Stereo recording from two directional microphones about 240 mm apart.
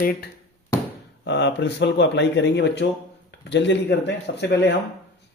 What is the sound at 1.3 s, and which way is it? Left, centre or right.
Speech, left.